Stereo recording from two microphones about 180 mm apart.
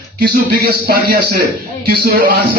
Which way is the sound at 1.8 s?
55° right (ahead or behind).